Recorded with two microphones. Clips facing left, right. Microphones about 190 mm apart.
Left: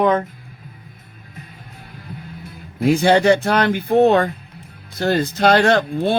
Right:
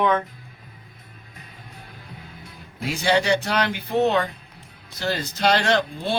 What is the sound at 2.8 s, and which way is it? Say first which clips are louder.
Speech: left 8 dB; 55° left (ahead or behind).